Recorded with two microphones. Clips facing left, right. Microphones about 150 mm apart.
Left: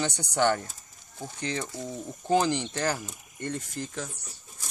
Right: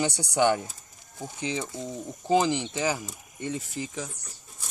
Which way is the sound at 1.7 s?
20° right (ahead or behind).